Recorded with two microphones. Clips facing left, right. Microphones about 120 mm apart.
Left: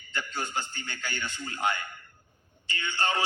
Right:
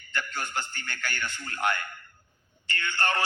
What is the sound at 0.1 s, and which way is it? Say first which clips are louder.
Music: even; 15° left (ahead or behind).